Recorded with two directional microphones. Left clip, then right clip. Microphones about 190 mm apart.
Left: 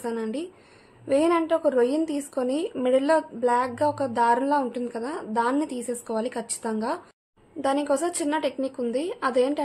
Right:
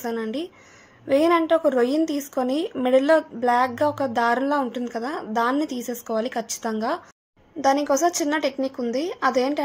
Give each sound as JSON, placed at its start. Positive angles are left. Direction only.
{"t": 0.0, "sound": "a woman's voice", "side_deg": -15}